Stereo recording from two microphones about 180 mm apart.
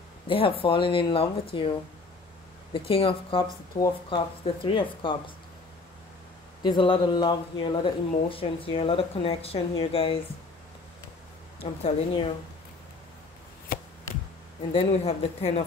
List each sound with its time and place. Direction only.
0.3 s speech: 30° left (ahead or behind)
6.6 s speech: 25° left (ahead or behind)
11.6 s speech: 25° left (ahead or behind)
13.7 s chopping: 55° left (ahead or behind)
14.7 s speech: 35° left (ahead or behind)